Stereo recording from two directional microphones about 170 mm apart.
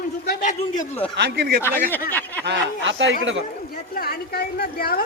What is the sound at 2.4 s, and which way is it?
Speech, 90° right.